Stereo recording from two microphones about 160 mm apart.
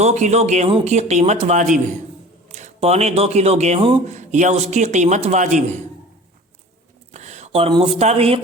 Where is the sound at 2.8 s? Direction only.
40° right (ahead or behind).